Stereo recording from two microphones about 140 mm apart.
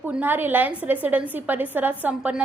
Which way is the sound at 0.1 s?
15° right (ahead or behind).